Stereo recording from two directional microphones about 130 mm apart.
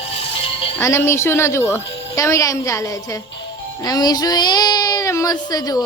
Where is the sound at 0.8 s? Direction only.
20° left (ahead or behind).